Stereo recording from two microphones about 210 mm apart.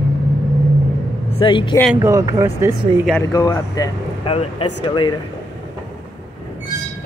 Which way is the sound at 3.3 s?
15° left (ahead or behind).